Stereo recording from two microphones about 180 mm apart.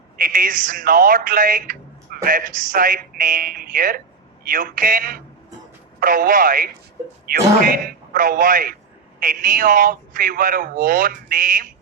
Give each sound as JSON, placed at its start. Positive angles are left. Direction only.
{"t": 0.2, "sound": "speech", "side_deg": -50}